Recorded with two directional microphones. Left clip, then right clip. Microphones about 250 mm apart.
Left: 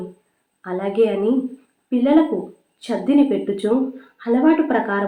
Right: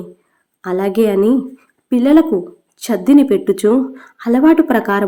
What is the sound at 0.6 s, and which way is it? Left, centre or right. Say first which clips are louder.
Speech: right 4 dB; right.